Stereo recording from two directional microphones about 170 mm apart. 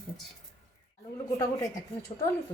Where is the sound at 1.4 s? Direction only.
20° left (ahead or behind).